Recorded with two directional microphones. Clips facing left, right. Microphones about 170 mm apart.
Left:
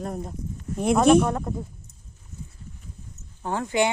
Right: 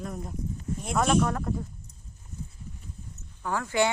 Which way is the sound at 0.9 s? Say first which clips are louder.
Left 7 dB; 15° left (ahead or behind).